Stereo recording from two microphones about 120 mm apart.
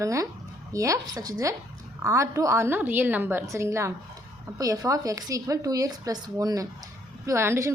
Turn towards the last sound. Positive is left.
turn(degrees=-20)  # may be behind; listen again after turning